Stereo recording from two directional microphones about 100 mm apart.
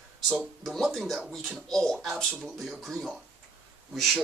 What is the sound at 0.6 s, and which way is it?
Speech, centre (ahead or behind).